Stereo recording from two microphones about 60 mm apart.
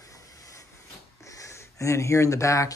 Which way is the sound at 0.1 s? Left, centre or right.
Left.